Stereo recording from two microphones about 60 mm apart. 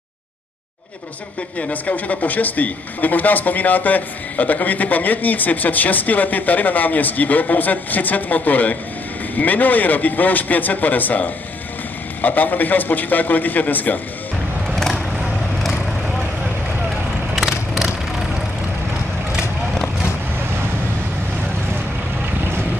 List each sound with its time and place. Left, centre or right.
1.6 s speech: left
14.7 s vehicle: centre
17.4 s vehicle: centre